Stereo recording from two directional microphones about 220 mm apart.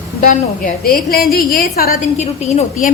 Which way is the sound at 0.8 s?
40° left (ahead or behind).